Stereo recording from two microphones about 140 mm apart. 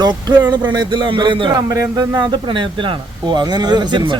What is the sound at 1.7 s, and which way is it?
Speech, 20° right (ahead or behind).